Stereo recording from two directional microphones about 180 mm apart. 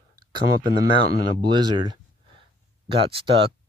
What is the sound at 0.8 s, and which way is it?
Speech, 25° right (ahead or behind).